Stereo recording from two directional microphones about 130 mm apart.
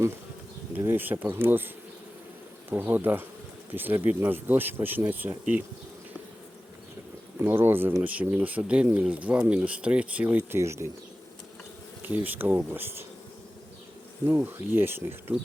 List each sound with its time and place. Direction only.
0.7 s speech: 15° right (ahead or behind)
7.3 s speech: 15° right (ahead or behind)
12.0 s speech: 15° right (ahead or behind)
14.3 s speech: 15° right (ahead or behind)